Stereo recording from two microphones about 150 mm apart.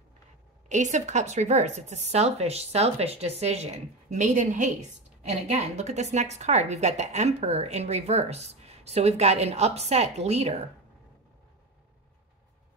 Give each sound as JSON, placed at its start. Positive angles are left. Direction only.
{"t": 0.7, "sound": "a woman's voice", "side_deg": -55}